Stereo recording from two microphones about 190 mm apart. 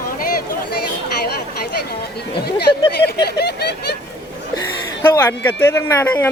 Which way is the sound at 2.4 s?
55° left (ahead or behind).